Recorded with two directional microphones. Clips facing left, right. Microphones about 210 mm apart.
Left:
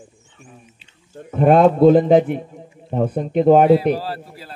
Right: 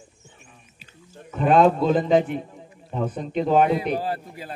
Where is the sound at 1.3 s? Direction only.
55° left (ahead or behind).